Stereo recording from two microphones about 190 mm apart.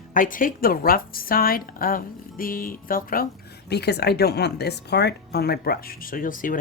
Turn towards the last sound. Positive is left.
turn(degrees=45)  # may be behind; listen again after turning